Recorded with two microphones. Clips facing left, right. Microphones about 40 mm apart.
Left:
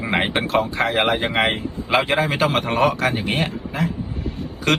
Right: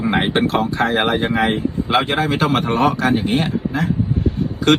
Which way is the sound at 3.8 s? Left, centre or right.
Right.